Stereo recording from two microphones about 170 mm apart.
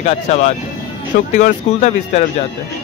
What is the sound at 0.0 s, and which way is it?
Speech, 40° left (ahead or behind).